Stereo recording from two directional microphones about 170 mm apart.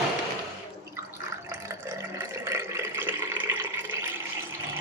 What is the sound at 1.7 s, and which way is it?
Water, 15° right (ahead or behind).